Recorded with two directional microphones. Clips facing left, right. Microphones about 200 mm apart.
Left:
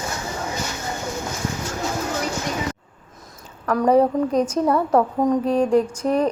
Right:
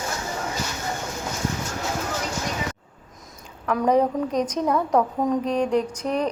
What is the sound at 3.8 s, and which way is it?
A woman's voice, 5° left (ahead or behind).